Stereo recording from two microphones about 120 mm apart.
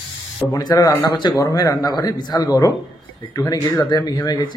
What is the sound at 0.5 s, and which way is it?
Speech, 30° left (ahead or behind).